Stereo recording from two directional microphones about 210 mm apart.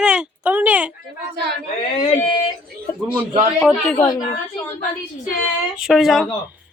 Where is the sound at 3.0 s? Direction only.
25° right (ahead or behind).